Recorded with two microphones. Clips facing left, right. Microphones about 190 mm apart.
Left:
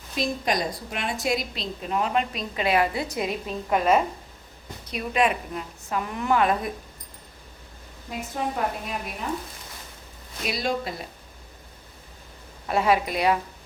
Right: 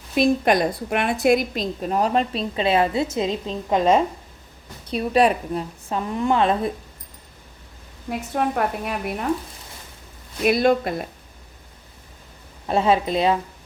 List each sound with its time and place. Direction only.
0.2 s a woman's voice: 60° right (ahead or behind); by 6.7 s 25° right (ahead or behind)
8.4 s a woman's voice: 65° right (ahead or behind)
10.4 s a woman's voice: 55° right (ahead or behind)
12.6 s a woman's voice: 25° right (ahead or behind)